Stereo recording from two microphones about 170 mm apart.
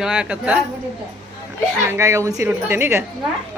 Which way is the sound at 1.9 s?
15° right (ahead or behind).